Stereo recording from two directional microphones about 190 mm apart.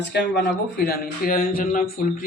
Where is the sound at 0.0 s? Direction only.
60° left (ahead or behind).